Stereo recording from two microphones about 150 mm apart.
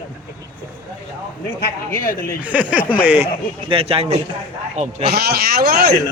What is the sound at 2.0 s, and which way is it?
Speech, 65° left (ahead or behind).